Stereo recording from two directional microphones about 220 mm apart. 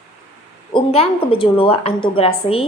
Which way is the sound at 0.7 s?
25° left (ahead or behind).